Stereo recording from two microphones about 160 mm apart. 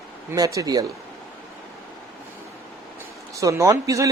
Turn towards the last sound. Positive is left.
turn(degrees=-20)  # may be behind; listen again after turning